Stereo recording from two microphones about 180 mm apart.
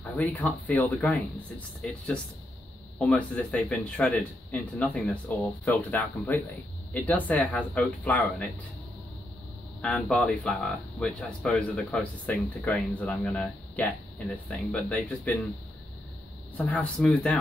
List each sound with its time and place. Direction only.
0.0 s speech: 10° left (ahead or behind)
3.0 s speech: 5° left (ahead or behind)
9.8 s speech: 5° left (ahead or behind)
16.5 s speech: 10° left (ahead or behind)